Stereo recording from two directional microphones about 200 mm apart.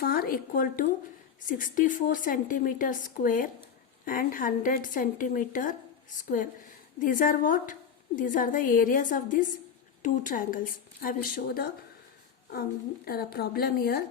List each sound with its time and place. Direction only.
0.0 s a woman's voice: 50° left (ahead or behind)
13.1 s a woman's voice: 50° left (ahead or behind)